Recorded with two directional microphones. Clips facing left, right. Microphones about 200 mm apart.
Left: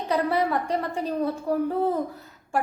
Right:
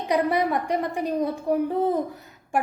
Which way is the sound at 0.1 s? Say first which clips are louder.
Right 1 dB; 15° right (ahead or behind).